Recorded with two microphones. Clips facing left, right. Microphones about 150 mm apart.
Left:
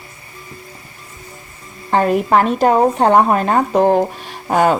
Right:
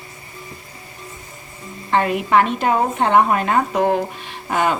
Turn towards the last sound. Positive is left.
turn(degrees=40)  # may be behind; listen again after turning